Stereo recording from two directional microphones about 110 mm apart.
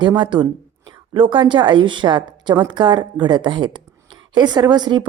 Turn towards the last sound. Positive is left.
turn(degrees=-40)  # may be behind; listen again after turning